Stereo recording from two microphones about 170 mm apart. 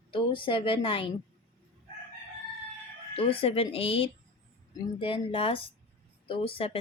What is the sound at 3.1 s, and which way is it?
A woman's voice, 35° left (ahead or behind).